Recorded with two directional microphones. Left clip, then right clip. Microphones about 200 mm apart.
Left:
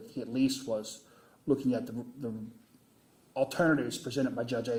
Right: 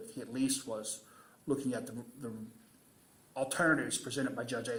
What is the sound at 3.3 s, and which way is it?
A man's voice, 40° left (ahead or behind).